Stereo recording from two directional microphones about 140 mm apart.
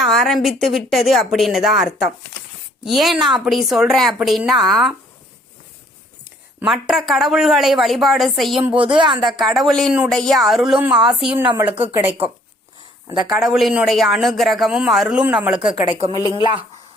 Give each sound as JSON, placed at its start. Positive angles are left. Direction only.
{"t": 0.0, "sound": "a man's voice", "side_deg": 0}
{"t": 6.7, "sound": "a man's voice", "side_deg": 0}
{"t": 8.7, "sound": "a woman's voice", "side_deg": -40}
{"t": 9.2, "sound": "a man's voice", "side_deg": 0}
{"t": 11.7, "sound": "speech", "side_deg": -45}
{"t": 13.3, "sound": "a man's voice", "side_deg": 0}
{"t": 15.6, "sound": "a woman's voice", "side_deg": -35}